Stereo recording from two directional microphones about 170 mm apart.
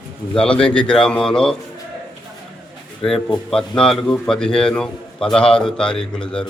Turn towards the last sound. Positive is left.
turn(degrees=5)  # may be behind; listen again after turning